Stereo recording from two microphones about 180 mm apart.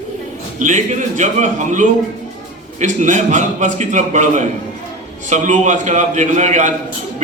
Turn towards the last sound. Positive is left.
turn(degrees=-40)  # may be behind; listen again after turning